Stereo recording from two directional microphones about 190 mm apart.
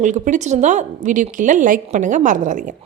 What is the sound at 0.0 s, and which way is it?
Speech, 40° right (ahead or behind).